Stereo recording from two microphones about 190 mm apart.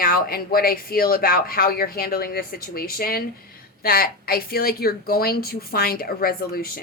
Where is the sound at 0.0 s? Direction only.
50° left (ahead or behind).